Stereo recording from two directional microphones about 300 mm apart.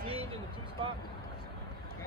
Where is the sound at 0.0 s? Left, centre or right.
Centre.